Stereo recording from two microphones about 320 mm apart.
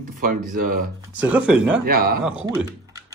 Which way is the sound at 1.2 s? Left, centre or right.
Centre.